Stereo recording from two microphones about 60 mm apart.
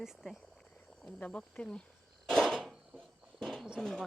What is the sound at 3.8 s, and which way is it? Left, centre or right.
Speech, centre.